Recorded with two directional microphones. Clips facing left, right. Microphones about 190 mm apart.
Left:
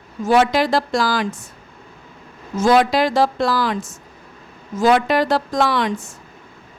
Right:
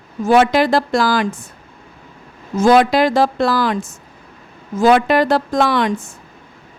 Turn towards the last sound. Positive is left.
turn(degrees=-50)  # may be behind; listen again after turning